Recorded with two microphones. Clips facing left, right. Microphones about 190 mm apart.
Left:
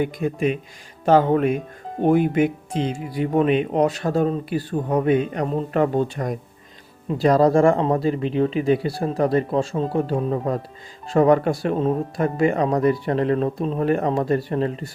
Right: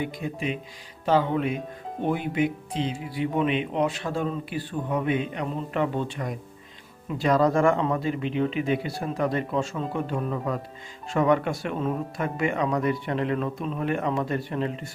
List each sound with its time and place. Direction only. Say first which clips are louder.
0.0 s speech: left 8 dB; 50° left (ahead or behind)